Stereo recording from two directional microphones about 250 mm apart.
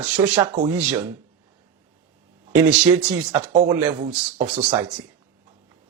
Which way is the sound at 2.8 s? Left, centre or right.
Centre.